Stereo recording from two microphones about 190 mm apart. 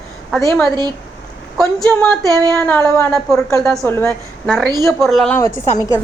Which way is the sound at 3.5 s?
Centre (ahead or behind).